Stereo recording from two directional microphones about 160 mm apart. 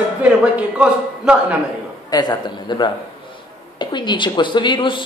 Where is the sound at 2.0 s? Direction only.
25° left (ahead or behind).